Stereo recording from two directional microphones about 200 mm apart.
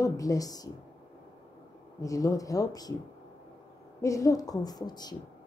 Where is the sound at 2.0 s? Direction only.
15° left (ahead or behind).